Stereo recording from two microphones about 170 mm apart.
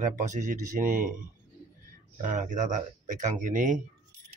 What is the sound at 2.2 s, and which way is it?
Speech, 50° right (ahead or behind).